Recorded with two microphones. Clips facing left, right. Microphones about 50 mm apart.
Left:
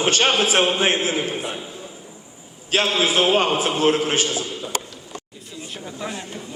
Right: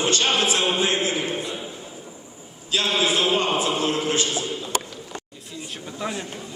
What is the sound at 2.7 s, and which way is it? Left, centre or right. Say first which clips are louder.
Speech: left 3 dB; left.